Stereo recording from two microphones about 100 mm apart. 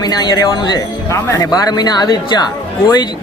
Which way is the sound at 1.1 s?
30° left (ahead or behind).